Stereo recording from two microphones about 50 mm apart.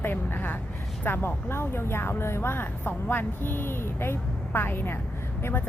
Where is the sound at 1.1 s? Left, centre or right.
Left.